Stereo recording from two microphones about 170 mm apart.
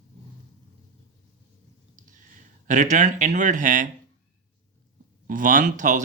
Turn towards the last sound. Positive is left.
turn(degrees=-50)  # may be behind; listen again after turning